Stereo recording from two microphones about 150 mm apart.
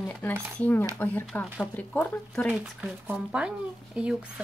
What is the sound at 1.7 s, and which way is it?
Speech, 10° left (ahead or behind).